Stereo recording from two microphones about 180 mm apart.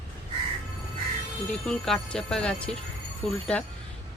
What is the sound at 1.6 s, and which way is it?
Speech, 5° left (ahead or behind).